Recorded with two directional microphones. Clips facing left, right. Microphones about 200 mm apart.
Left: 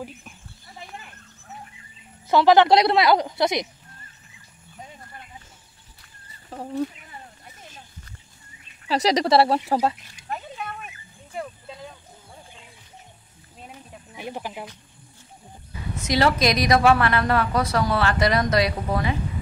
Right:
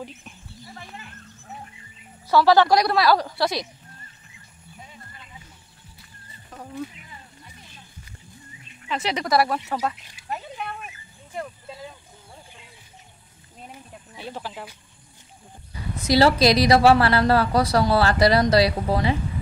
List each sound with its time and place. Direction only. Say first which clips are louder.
2.2 s a woman's voice: left 1 dB; 20° left (ahead or behind)
6.5 s speech: left 6 dB; 30° left (ahead or behind)
8.8 s speech: left 6 dB; 35° left (ahead or behind)
10.1 s a sound: even; 5° right (ahead or behind)
14.1 s speech: left 2 dB; 15° left (ahead or behind)
16.0 s a woman's voice: right 3 dB; 35° right (ahead or behind)